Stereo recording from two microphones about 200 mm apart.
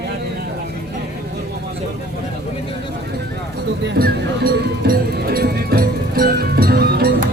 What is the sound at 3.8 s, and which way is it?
Music, 50° right (ahead or behind).